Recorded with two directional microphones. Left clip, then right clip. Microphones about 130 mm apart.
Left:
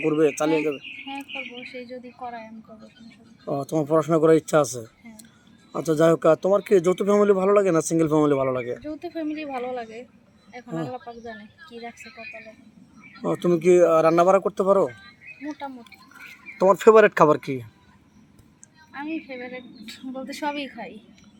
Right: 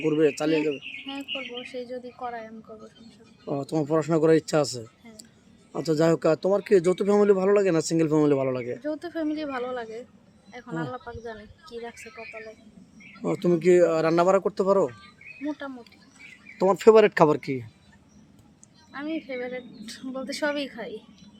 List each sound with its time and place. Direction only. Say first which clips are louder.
0.0 s speech: left 2 dB; centre (ahead or behind)
1.7 s speech: right 2 dB; 25° right (ahead or behind)
3.5 s speech: left 3 dB; 5° left (ahead or behind)
6.0 s speech: left 4 dB; centre (ahead or behind)
8.8 s speech: right 1 dB; 25° right (ahead or behind)
13.2 s speech: left 2 dB; centre (ahead or behind)
16.6 s speech: left 2 dB; centre (ahead or behind)
18.9 s speech: right 1 dB; 25° right (ahead or behind)